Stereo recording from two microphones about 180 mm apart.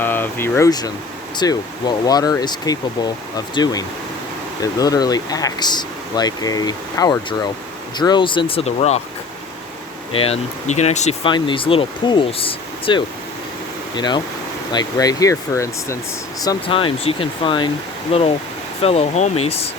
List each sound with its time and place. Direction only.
0.0 s speech: 10° left (ahead or behind); by 9.0 s 35° left (ahead or behind)
10.2 s speech: 35° left (ahead or behind)
11.3 s speech: 25° left (ahead or behind)